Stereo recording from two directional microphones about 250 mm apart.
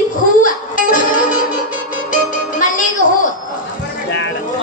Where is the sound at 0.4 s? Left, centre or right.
Left.